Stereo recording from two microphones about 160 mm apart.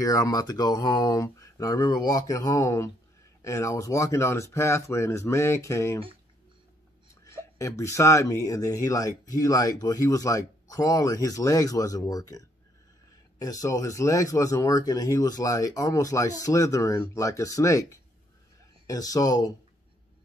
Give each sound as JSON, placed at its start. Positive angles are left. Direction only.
{"t": 0.0, "sound": "speech", "side_deg": 20}
{"t": 7.2, "sound": "speech", "side_deg": 20}